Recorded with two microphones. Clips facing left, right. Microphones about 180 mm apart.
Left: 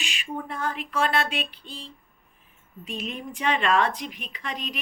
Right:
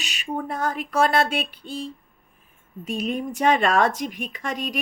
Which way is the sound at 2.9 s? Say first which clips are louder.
Right 7 dB; 45° right (ahead or behind).